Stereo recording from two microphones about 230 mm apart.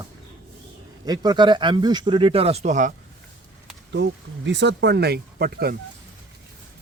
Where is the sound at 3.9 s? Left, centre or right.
Right.